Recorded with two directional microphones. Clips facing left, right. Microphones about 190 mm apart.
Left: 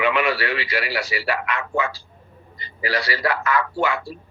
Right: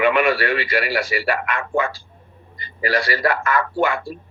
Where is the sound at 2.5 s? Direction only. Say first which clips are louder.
Right 4 dB; 50° right (ahead or behind).